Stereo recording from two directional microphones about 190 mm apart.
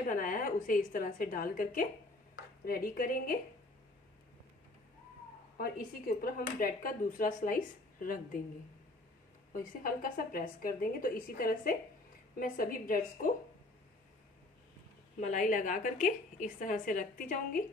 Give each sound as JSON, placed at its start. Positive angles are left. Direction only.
{"t": 0.1, "sound": "a woman's voice", "side_deg": 45}
{"t": 5.6, "sound": "speech", "side_deg": 50}
{"t": 9.5, "sound": "speech", "side_deg": 45}
{"t": 15.1, "sound": "speech", "side_deg": 40}